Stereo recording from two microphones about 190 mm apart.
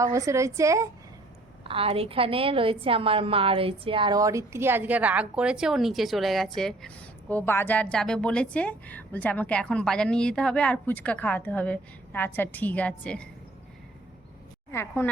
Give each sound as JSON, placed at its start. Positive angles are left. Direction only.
{"t": 0.0, "sound": "a woman's voice", "side_deg": -15}
{"t": 1.6, "sound": "a woman's voice", "side_deg": -30}
{"t": 14.7, "sound": "a woman's voice", "side_deg": 10}